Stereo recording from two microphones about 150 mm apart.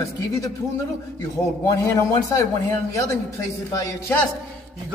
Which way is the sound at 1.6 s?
20° left (ahead or behind).